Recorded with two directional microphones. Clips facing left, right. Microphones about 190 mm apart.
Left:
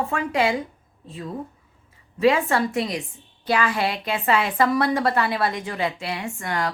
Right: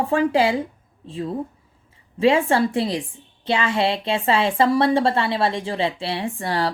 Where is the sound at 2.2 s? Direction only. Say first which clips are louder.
Right 2 dB; 30° right (ahead or behind).